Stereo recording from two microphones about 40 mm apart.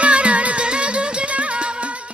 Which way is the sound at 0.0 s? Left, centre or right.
Right.